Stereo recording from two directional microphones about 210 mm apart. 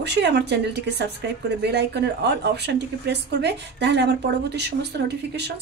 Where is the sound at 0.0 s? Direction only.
55° right (ahead or behind).